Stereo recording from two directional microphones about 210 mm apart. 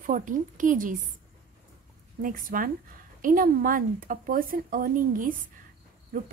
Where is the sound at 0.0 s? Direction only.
40° right (ahead or behind).